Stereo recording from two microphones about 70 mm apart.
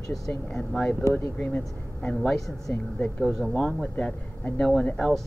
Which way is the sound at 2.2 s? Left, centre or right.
Centre.